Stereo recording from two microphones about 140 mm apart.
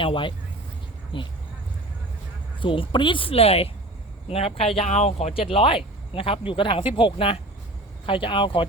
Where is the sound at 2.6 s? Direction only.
35° left (ahead or behind).